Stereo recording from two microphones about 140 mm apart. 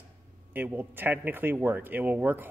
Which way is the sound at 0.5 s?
15° right (ahead or behind).